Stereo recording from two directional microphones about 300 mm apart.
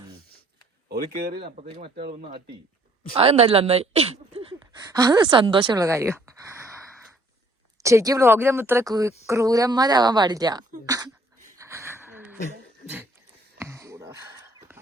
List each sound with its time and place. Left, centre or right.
0.9 s speech: right
1.5 s speech: centre
2.0 s speech: right
3.2 s speech: centre
7.8 s speech: centre
10.8 s a sound: centre
13.6 s a sound: centre